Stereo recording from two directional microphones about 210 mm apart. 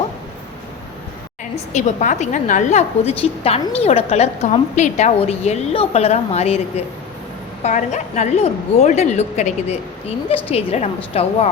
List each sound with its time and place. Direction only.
1.7 s a woman's voice: 35° left (ahead or behind)